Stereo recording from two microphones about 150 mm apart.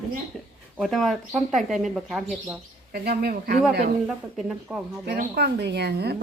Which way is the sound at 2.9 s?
90° right.